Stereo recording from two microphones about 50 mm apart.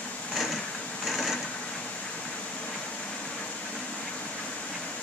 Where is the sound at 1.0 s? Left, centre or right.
Centre.